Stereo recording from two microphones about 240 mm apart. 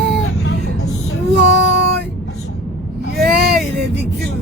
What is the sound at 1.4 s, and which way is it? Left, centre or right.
Child singing, right.